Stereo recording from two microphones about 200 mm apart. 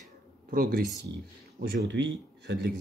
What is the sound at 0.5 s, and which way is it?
Speech, 45° right (ahead or behind).